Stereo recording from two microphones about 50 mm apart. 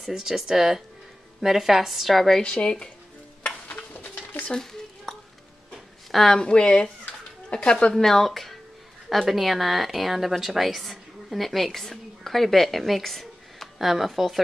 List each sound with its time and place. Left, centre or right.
0.0 s speech: centre
2.4 s speech: centre
3.6 s a sound: left
4.5 s a sound: centre
6.1 s speech: centre
6.4 s speech: centre
7.9 s a woman's voice: centre